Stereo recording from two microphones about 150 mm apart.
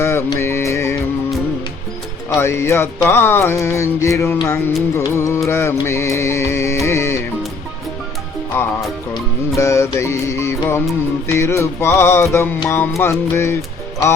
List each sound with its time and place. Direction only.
0.0 s music: 15° left (ahead or behind)
2.3 s music: 15° left (ahead or behind)
9.6 s music: 20° left (ahead or behind)